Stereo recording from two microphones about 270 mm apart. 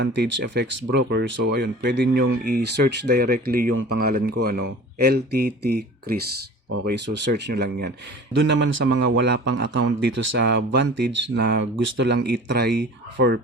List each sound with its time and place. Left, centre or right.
0.0 s speech: right